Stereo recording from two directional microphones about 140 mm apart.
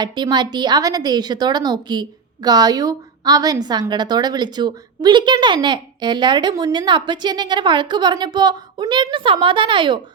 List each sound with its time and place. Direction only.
0.0 s a woman's voice: 30° right (ahead or behind)